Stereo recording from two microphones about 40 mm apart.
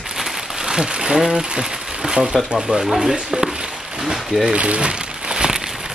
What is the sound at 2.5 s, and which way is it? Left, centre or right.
Speech, centre.